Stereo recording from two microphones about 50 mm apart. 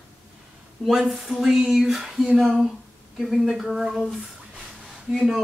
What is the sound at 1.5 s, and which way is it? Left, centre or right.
Speech, centre.